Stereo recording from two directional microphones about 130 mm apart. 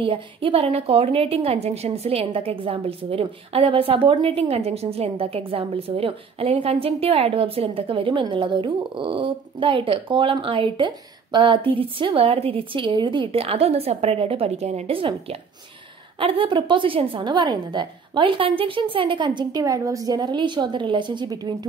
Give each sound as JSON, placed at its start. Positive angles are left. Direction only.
{"t": 0.0, "sound": "a woman's voice", "side_deg": -45}